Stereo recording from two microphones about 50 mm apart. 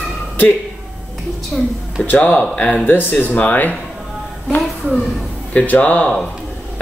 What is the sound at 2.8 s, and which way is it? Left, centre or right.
Speech, left.